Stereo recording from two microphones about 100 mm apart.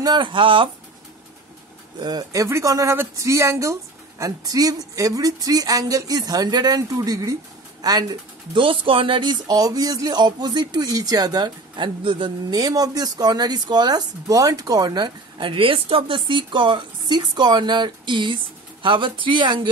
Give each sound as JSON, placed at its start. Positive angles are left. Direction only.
{"t": 0.0, "sound": "speech", "side_deg": -50}
{"t": 2.0, "sound": "speech", "side_deg": -40}
{"t": 8.5, "sound": "speech", "side_deg": -60}
{"t": 12.4, "sound": "speech", "side_deg": -40}